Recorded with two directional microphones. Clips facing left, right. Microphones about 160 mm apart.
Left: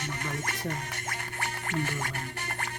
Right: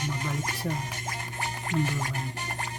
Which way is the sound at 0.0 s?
15° right (ahead or behind).